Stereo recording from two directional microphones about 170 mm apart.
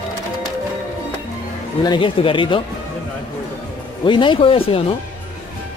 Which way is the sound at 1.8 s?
30° left (ahead or behind).